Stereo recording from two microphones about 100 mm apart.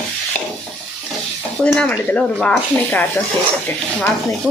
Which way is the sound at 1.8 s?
10° left (ahead or behind).